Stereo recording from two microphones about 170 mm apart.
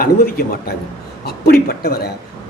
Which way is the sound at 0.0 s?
60° left (ahead or behind).